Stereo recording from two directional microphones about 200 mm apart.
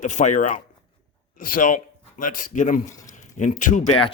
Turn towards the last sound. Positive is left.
turn(degrees=35)  # may be behind; listen again after turning